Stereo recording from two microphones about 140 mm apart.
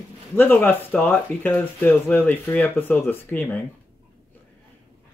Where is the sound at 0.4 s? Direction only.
15° left (ahead or behind).